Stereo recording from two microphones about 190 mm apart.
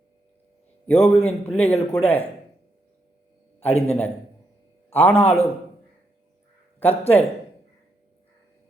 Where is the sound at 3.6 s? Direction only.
35° left (ahead or behind).